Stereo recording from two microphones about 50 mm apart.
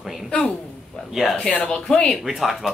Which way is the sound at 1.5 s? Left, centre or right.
Left.